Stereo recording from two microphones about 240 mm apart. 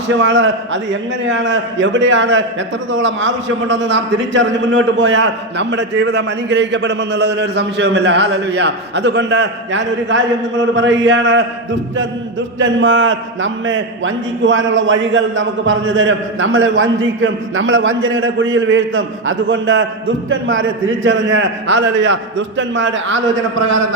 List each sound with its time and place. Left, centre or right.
0.2 s a man's voice: right